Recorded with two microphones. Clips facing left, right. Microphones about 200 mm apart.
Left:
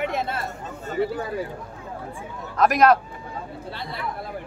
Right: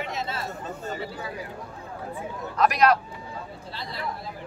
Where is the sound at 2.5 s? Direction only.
50° left (ahead or behind).